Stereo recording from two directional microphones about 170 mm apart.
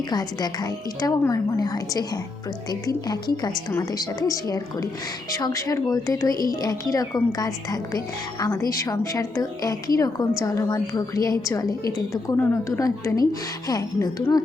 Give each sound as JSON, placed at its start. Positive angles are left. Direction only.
{"t": 0.1, "sound": "a woman's voice", "side_deg": 25}